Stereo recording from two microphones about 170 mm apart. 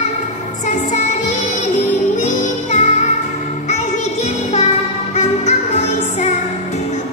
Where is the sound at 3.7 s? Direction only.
40° left (ahead or behind).